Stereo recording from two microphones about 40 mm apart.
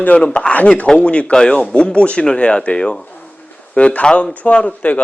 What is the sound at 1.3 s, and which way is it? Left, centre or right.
Speech, centre.